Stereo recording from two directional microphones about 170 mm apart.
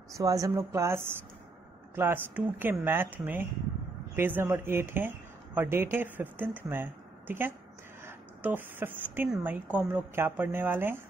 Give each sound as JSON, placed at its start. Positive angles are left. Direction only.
{"t": 0.1, "sound": "a woman's voice", "side_deg": -20}